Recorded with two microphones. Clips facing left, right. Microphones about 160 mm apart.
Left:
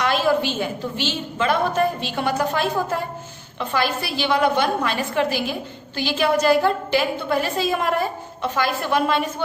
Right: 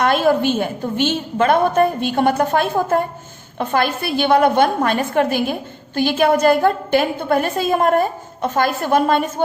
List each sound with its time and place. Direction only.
0.0 s a woman's voice: 50° right (ahead or behind)